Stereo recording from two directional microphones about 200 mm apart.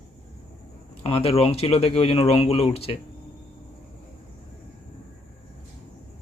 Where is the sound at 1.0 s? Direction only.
30° left (ahead or behind).